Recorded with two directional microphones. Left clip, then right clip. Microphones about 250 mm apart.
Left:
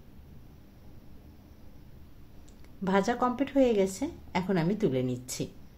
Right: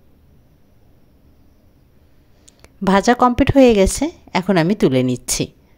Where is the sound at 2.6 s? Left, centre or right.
Right.